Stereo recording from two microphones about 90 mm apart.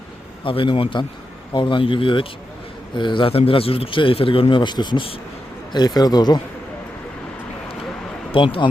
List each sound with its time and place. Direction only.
0.4 s a man's voice: 70° left (ahead or behind)
5.7 s speech: 50° left (ahead or behind)
8.3 s speech: 70° left (ahead or behind)